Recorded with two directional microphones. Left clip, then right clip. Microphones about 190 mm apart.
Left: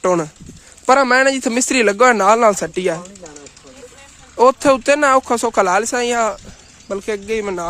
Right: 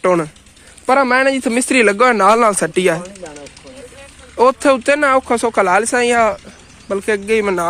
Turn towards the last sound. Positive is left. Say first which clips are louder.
# right 6 dB
turn(degrees=5)  # may be behind; listen again after turning